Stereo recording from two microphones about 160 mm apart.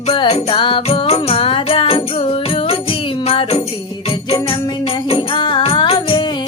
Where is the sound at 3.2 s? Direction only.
35° left (ahead or behind).